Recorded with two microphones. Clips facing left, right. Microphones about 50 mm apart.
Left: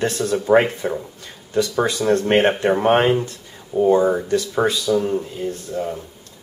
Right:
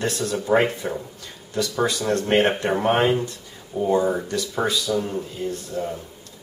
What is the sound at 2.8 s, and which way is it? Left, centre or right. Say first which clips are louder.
Speech: left 2 dB; centre.